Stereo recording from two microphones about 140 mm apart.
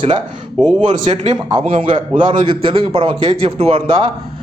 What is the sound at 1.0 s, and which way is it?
Speech, 55° right (ahead or behind).